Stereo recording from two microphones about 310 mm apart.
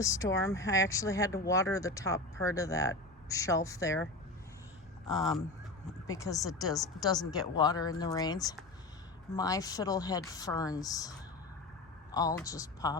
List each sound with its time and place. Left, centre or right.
0.0 s speech: centre
6.1 s speech: centre
12.1 s speech: centre